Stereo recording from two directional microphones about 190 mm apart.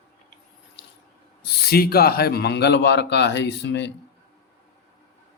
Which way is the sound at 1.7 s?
55° left (ahead or behind).